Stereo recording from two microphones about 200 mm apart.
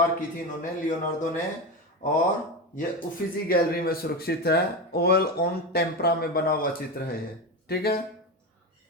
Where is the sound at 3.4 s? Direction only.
50° left (ahead or behind).